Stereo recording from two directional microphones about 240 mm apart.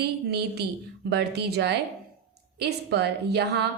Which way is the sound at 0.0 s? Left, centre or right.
Right.